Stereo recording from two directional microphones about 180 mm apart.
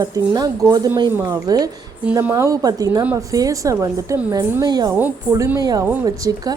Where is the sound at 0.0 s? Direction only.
20° right (ahead or behind).